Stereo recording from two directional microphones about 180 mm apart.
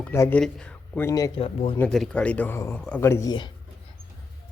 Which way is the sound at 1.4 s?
30° left (ahead or behind).